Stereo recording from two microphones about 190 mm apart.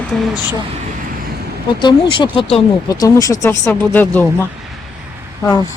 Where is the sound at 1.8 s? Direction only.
25° left (ahead or behind); by 4.3 s 10° left (ahead or behind).